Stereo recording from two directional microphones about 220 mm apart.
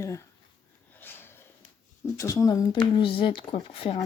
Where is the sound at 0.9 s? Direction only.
10° left (ahead or behind).